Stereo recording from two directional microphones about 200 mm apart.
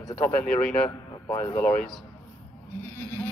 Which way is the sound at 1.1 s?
15° left (ahead or behind).